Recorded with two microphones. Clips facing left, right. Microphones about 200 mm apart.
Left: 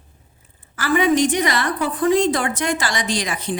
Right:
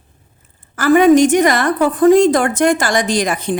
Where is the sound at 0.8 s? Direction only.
45° right (ahead or behind).